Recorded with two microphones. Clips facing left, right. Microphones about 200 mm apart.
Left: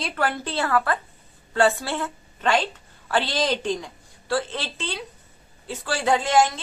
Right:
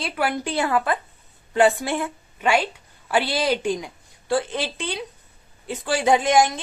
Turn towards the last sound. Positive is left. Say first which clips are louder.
# right 2 dB
turn(degrees=-15)  # may be behind; listen again after turning